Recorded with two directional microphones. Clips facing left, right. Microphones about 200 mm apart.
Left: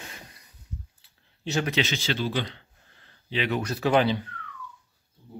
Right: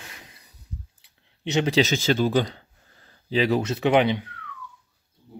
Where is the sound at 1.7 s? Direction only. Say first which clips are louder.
Right 7 dB; 45° right (ahead or behind).